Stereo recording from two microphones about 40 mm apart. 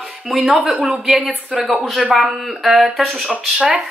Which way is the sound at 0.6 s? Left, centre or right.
Right.